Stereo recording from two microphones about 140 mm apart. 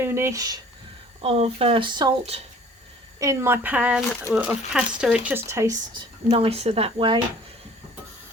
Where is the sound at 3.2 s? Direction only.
20° right (ahead or behind).